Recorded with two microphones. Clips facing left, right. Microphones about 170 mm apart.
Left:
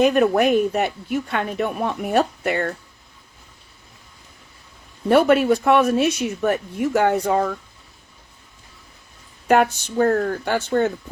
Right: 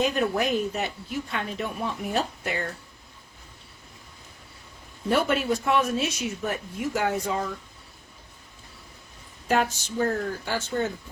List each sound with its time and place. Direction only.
0.0 s speech: 60° left (ahead or behind)
5.0 s speech: 60° left (ahead or behind)
9.5 s speech: 60° left (ahead or behind)